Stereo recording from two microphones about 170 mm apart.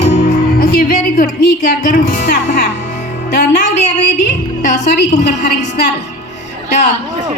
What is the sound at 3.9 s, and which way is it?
Music, 50° left (ahead or behind).